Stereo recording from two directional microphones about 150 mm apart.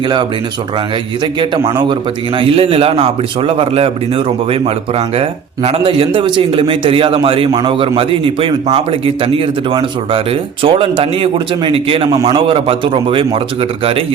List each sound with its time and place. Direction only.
1.2 s a man's voice: 35° right (ahead or behind)